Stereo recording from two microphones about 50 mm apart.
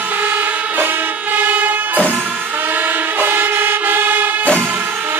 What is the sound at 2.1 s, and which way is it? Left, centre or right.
Vehicle, right.